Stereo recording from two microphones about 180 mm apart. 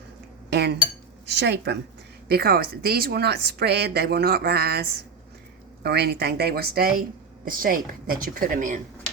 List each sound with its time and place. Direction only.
0.5 s a woman's voice: 70° right (ahead or behind)
2.3 s a woman's voice: 60° right (ahead or behind)